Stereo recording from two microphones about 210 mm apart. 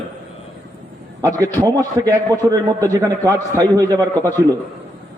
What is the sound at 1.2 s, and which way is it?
A man's voice, 15° right (ahead or behind).